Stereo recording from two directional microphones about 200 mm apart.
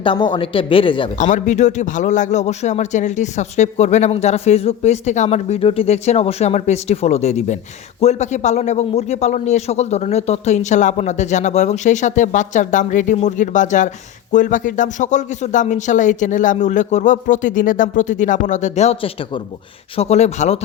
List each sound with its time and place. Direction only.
0.0 s speech: 25° left (ahead or behind)
1.2 s a man's voice: 35° left (ahead or behind)